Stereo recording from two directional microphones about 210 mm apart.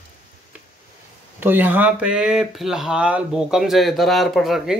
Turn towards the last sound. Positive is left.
turn(degrees=0)  # may be behind; listen again after turning